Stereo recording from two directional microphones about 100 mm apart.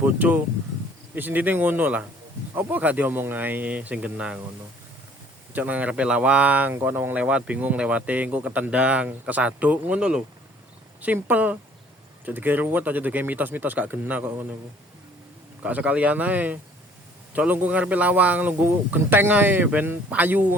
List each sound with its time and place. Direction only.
0.0 s speech: 15° right (ahead or behind)
5.5 s speech: 15° right (ahead or behind)
15.6 s speech: 15° right (ahead or behind)